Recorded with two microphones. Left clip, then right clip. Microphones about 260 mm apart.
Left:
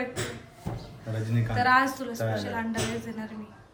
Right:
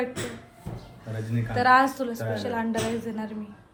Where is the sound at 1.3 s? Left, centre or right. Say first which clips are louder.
Right 3 dB; centre.